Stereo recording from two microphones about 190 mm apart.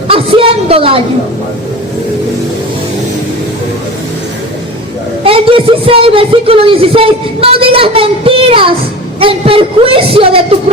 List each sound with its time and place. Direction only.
0.1 s a woman's voice: 30° right (ahead or behind)
5.2 s speech: 30° right (ahead or behind)